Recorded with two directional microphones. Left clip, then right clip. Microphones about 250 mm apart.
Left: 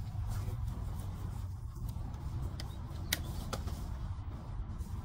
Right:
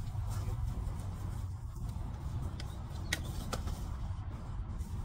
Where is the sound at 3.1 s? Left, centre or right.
Left.